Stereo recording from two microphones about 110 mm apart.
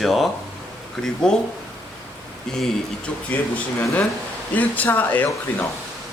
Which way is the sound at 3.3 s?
15° left (ahead or behind).